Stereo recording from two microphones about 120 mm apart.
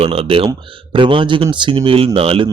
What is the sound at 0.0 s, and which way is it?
Speech, 50° right (ahead or behind).